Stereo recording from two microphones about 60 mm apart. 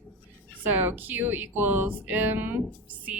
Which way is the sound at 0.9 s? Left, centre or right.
Right.